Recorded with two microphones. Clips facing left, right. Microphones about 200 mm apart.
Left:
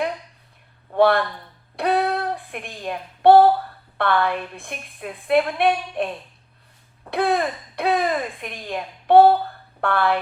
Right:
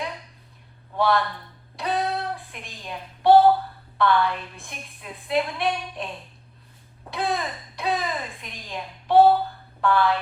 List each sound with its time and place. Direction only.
0.9 s speech: 60° left (ahead or behind)
1.7 s a sound: 60° left (ahead or behind)
3.9 s speech: 60° left (ahead or behind)
7.1 s speech: 60° left (ahead or behind)